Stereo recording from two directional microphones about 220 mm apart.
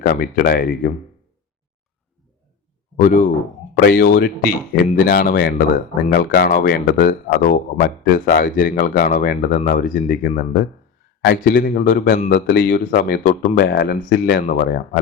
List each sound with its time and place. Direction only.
0.0 s speech: 40° left (ahead or behind)
3.0 s speech: 40° left (ahead or behind)